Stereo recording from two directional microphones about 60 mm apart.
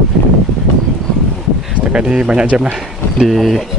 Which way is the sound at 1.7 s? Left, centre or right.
Centre.